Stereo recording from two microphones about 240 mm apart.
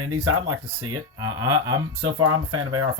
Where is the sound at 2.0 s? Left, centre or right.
Right.